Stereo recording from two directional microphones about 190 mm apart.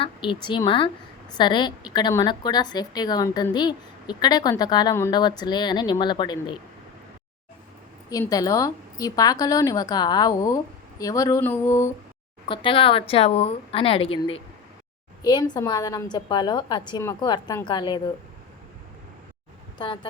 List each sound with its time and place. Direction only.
0.0 s a woman's voice: 25° left (ahead or behind)
8.1 s a woman's voice: 20° left (ahead or behind)
11.0 s a sound: 20° left (ahead or behind)
12.5 s a woman's voice: 30° left (ahead or behind)
19.8 s a woman's voice: 25° left (ahead or behind)